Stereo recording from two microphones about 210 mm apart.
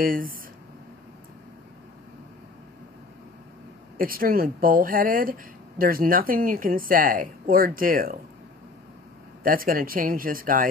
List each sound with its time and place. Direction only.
0.0 s speech: 40° right (ahead or behind)
4.0 s speech: 45° right (ahead or behind)
9.4 s speech: 45° right (ahead or behind)